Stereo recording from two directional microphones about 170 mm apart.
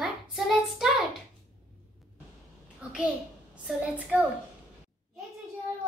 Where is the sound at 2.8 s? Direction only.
5° right (ahead or behind).